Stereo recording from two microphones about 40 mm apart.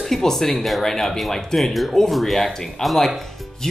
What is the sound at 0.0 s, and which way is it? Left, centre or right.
Speech, centre.